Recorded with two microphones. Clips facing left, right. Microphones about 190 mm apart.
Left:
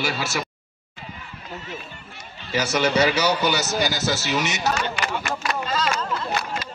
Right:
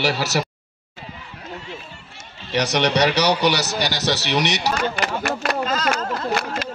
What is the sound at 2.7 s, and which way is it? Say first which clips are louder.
Speech: right 1 dB; 70° right (ahead or behind).